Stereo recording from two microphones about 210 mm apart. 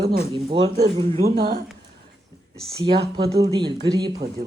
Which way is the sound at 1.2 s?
45° right (ahead or behind).